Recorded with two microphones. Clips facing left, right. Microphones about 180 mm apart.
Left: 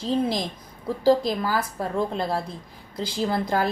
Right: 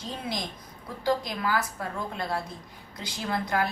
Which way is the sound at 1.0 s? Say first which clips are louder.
Left 7 dB; 30° left (ahead or behind).